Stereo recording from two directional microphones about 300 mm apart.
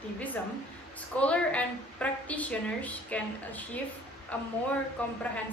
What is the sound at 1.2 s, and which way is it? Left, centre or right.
A woman's voice, centre.